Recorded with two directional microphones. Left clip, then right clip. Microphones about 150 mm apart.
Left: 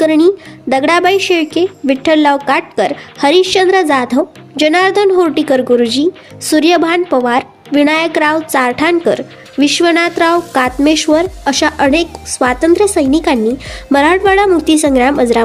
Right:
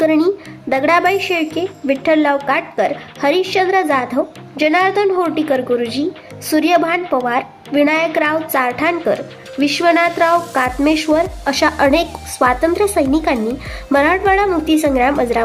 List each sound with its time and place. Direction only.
0.0 s a woman's voice: 30° left (ahead or behind)